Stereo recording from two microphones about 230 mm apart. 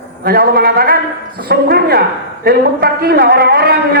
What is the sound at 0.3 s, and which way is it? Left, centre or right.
A man's voice, right.